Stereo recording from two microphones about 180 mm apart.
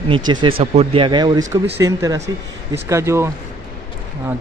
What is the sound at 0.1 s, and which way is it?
A man's voice, 25° right (ahead or behind).